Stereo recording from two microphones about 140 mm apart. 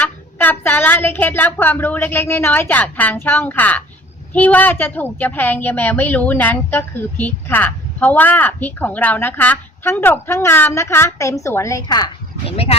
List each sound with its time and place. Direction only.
0.0 s a woman's voice: 15° left (ahead or behind)
12.5 s speech: 45° left (ahead or behind)